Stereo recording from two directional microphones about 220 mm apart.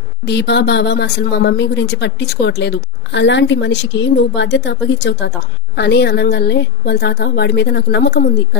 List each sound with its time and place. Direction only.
0.3 s speech: 50° left (ahead or behind)